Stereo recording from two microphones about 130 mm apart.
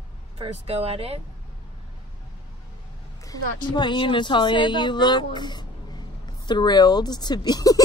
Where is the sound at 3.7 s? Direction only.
35° left (ahead or behind).